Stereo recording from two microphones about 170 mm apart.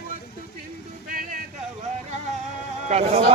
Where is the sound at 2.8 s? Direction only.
40° right (ahead or behind).